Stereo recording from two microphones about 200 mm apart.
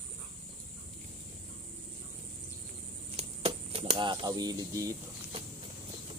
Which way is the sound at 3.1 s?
30° right (ahead or behind).